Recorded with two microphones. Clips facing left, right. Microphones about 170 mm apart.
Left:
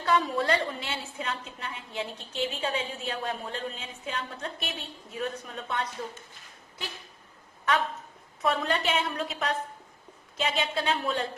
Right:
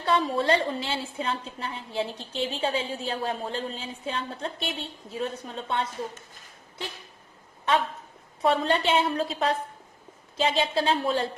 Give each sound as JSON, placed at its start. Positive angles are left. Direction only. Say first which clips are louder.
{"t": 0.0, "sound": "a woman's voice", "louder": "right 2 dB", "side_deg": -30}
{"t": 8.4, "sound": "a woman's voice", "louder": "right 4 dB", "side_deg": -30}